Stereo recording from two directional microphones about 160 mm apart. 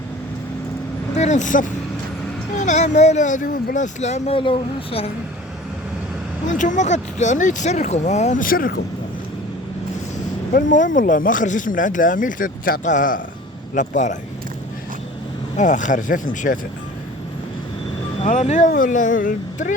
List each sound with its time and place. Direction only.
1.1 s speech: 45° left (ahead or behind)
6.6 s speech: 50° left (ahead or behind)
10.5 s speech: 55° left (ahead or behind)
15.5 s speech: 50° left (ahead or behind)
18.2 s speech: 45° left (ahead or behind)